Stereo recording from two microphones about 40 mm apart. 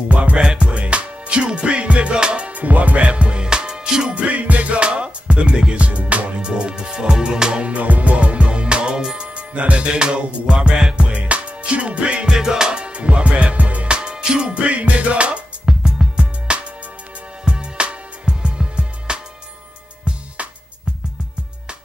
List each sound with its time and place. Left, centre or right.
0.1 s music: right
0.4 s music: centre
0.7 s music: right
4.2 s music: right
5.9 s music: right
6.3 s music: right
7.6 s music: right
11.1 s music: right
12.3 s music: centre; by 13.9 s right
13.9 s music: right
15.8 s music: centre
16.5 s music: right